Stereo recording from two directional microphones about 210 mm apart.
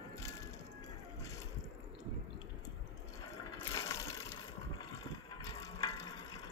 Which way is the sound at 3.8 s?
15° left (ahead or behind).